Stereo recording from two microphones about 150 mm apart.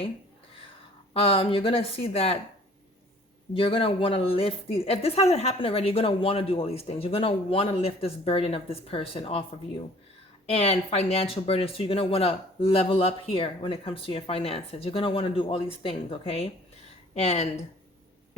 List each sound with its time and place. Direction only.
1.1 s speech: 40° left (ahead or behind)
3.5 s speech: 35° left (ahead or behind)
10.5 s speech: 45° left (ahead or behind)